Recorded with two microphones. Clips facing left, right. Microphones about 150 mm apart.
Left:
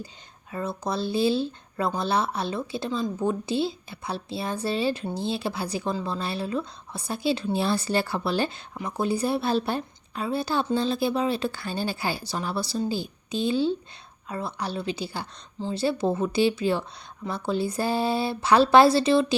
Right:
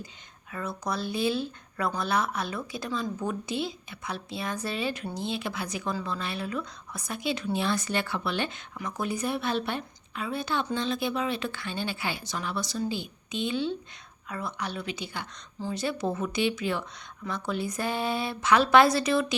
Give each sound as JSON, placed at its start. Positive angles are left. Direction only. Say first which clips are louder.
{"t": 0.5, "sound": "speech", "louder": "left 3 dB", "side_deg": 25}